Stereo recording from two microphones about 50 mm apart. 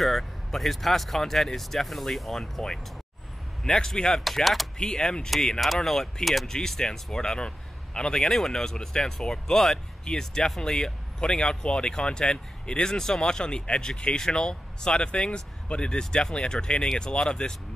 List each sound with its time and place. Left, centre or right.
0.0 s a man's voice: centre